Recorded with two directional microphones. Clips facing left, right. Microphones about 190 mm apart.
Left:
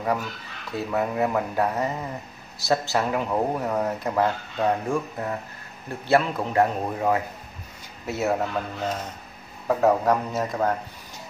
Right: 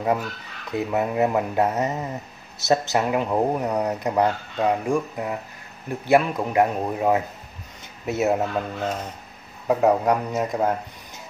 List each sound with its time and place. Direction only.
0.7 s speech: 20° right (ahead or behind)